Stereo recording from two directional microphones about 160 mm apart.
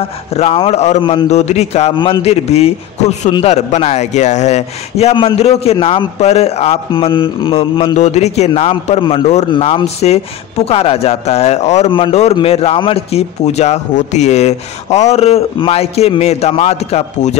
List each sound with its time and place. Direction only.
0.4 s a man's voice: 40° left (ahead or behind)
3.4 s a man's voice: 45° left (ahead or behind)
7.9 s a man's voice: 45° left (ahead or behind)